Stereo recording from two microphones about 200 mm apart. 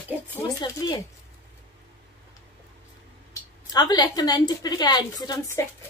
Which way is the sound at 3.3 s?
20° left (ahead or behind).